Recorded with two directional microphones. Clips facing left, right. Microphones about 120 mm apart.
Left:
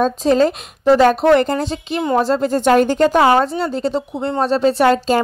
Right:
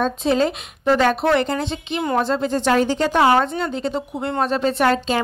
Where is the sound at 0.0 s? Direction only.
40° left (ahead or behind).